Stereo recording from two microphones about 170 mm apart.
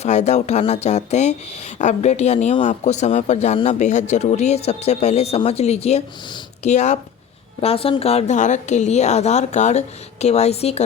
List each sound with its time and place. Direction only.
0.0 s speech: 40° left (ahead or behind)